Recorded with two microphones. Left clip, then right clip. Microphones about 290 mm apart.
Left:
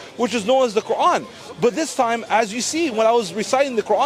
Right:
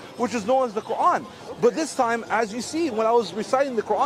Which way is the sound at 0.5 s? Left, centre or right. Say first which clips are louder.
Left 5 dB; left.